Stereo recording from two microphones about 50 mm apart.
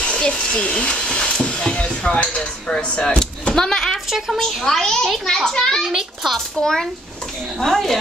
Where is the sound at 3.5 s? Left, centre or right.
Centre.